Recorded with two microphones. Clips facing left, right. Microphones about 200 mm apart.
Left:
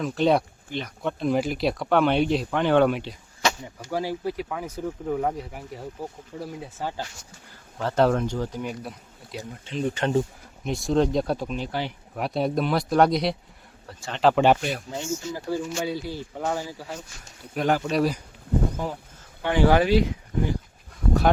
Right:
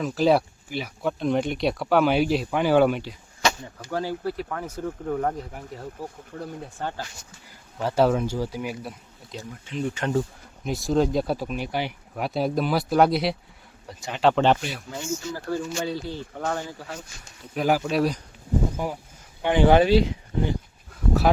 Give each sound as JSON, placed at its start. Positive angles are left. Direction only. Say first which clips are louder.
{"t": 0.0, "sound": "speech", "louder": "right 1 dB", "side_deg": 0}
{"t": 3.6, "sound": "speech", "louder": "even", "side_deg": 10}
{"t": 7.8, "sound": "speech", "louder": "even", "side_deg": -10}
{"t": 9.6, "sound": "speech", "louder": "left 2 dB", "side_deg": 30}
{"t": 10.6, "sound": "speech", "louder": "even", "side_deg": 0}
{"t": 12.1, "sound": "speech", "louder": "even", "side_deg": 0}
{"t": 13.8, "sound": "speech", "louder": "right 1 dB", "side_deg": -15}
{"t": 14.2, "sound": "speech", "louder": "left 1 dB", "side_deg": 0}
{"t": 14.8, "sound": "speech", "louder": "even", "side_deg": 20}
{"t": 17.5, "sound": "speech", "louder": "right 1 dB", "side_deg": -5}
{"t": 19.4, "sound": "speech", "louder": "right 2 dB", "side_deg": -20}
{"t": 20.9, "sound": "dog", "louder": "even", "side_deg": 0}